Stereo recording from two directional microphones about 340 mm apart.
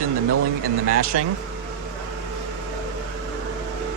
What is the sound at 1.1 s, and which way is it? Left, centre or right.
Speech, right.